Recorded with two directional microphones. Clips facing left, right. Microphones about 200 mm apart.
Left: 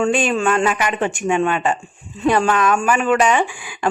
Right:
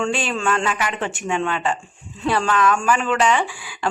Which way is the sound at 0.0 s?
20° left (ahead or behind).